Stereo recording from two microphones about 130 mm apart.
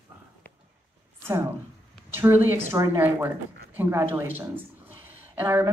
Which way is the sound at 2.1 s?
15° right (ahead or behind).